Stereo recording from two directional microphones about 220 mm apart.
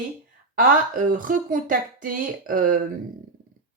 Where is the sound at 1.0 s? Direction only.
40° right (ahead or behind).